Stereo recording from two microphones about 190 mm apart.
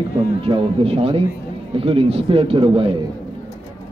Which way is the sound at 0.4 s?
30° right (ahead or behind).